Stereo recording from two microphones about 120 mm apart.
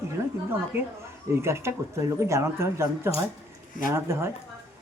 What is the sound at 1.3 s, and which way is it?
Speech, 20° right (ahead or behind).